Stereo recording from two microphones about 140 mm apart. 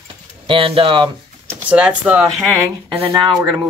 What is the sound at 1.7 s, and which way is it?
Speech, 10° right (ahead or behind).